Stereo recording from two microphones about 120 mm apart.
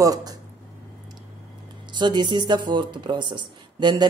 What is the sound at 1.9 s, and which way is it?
Speech, 40° right (ahead or behind).